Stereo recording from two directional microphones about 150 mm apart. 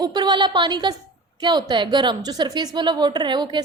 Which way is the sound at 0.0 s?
30° right (ahead or behind).